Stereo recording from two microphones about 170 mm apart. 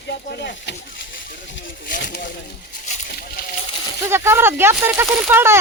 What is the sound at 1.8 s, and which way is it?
Speech, 50° left (ahead or behind).